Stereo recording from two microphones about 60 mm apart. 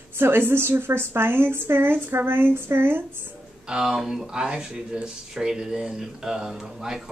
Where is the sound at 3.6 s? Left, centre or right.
Centre.